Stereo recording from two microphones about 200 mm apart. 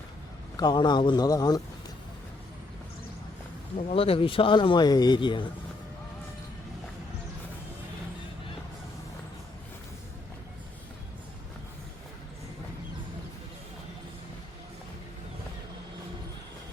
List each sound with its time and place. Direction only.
0.5 s speech: 20° left (ahead or behind)
3.8 s speech: 30° left (ahead or behind)